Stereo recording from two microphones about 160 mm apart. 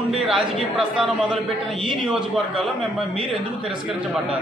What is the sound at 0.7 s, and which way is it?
A man's voice, 5° right (ahead or behind).